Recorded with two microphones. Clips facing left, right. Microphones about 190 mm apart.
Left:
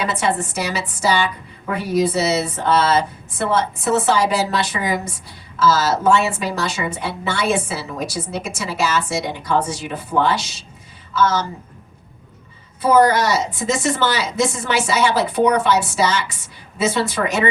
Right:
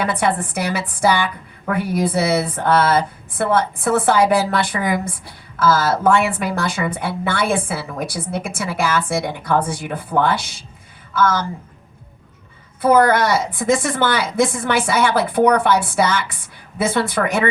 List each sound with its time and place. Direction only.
0.0 s a woman's voice: 55° right (ahead or behind)
12.8 s a woman's voice: 55° right (ahead or behind)